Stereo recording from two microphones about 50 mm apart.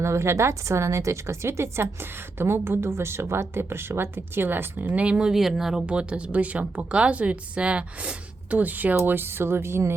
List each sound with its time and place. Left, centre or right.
0.0 s a woman's voice: right
4.9 s speech: right
5.3 s speech: centre
5.8 s speech: right